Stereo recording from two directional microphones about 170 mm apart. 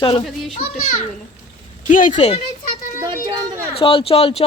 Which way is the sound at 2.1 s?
35° left (ahead or behind).